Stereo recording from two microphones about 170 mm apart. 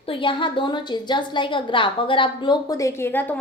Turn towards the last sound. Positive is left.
turn(degrees=10)  # may be behind; listen again after turning